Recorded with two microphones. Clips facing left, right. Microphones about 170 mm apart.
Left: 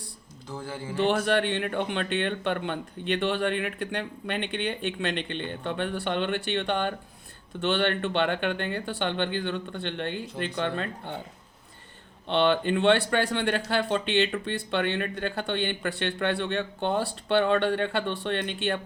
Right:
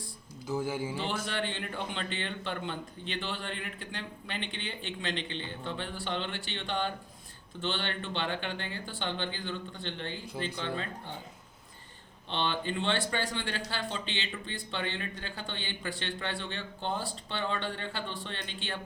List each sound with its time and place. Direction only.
0.4 s speech: 5° right (ahead or behind)
0.9 s speech: 65° left (ahead or behind)
12.3 s speech: 65° left (ahead or behind)